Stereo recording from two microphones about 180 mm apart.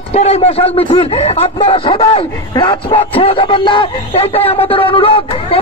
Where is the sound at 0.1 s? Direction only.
35° left (ahead or behind).